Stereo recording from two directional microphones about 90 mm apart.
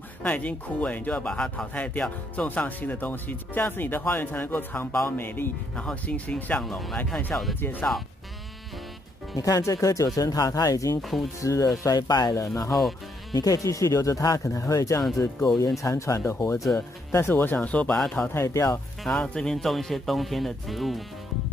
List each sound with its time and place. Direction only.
0.2 s speech: 15° left (ahead or behind)
9.4 s speech: 35° left (ahead or behind)
11.0 s speech: centre (ahead or behind)
11.4 s speech: 40° left (ahead or behind)
12.4 s speech: 35° left (ahead or behind)
17.1 s speech: 25° left (ahead or behind)
18.4 s speech: 40° left (ahead or behind)
19.0 s speech: 5° left (ahead or behind)